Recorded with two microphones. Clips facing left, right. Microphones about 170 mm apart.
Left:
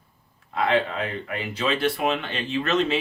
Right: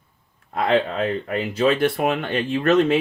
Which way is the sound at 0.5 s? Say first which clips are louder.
Right 3 dB; 50° right (ahead or behind).